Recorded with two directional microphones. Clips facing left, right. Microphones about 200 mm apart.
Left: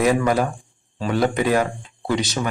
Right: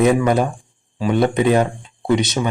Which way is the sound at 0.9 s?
15° right (ahead or behind).